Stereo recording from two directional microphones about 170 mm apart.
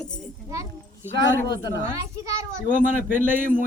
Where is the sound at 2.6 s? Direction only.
50° right (ahead or behind).